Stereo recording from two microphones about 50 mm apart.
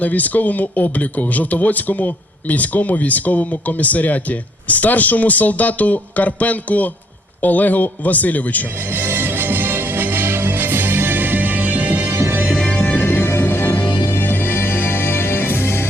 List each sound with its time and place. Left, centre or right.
0.0 s speech: left
8.9 s music: right
12.0 s music: right
12.5 s music: centre
12.8 s music: left
13.1 s music: left